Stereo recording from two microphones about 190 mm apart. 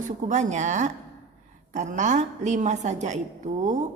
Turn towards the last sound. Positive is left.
turn(degrees=-40)  # may be behind; listen again after turning